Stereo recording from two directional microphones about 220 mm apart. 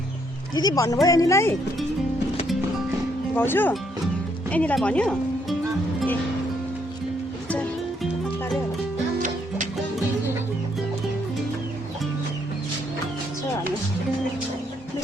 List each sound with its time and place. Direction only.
0.5 s speech: 15° left (ahead or behind)
3.3 s speech: 10° left (ahead or behind)